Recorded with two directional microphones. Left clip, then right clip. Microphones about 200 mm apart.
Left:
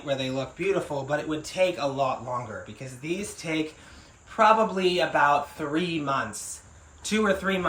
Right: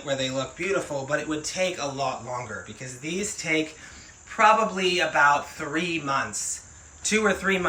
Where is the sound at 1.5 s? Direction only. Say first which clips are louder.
Left 6 dB; 10° left (ahead or behind).